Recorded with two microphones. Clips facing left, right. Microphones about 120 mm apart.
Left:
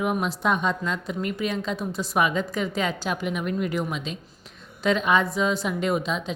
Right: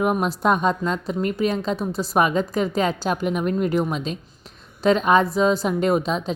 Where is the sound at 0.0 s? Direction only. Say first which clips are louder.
Right 4 dB; 45° right (ahead or behind).